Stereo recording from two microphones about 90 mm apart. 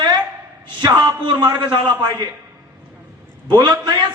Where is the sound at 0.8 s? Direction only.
50° right (ahead or behind).